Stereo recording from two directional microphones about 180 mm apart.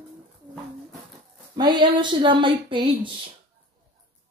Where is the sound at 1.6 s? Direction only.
25° right (ahead or behind).